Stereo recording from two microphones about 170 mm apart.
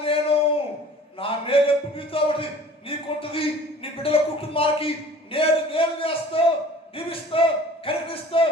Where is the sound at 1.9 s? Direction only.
30° left (ahead or behind).